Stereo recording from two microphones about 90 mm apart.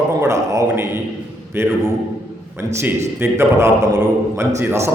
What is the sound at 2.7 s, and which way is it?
A man's voice, 25° right (ahead or behind).